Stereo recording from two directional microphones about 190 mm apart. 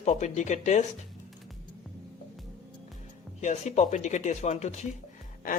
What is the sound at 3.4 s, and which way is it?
Speech, 40° left (ahead or behind).